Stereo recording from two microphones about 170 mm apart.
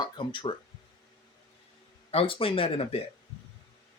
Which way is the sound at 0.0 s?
30° left (ahead or behind).